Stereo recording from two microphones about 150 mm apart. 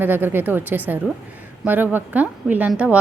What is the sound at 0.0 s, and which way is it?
Speech, 15° right (ahead or behind).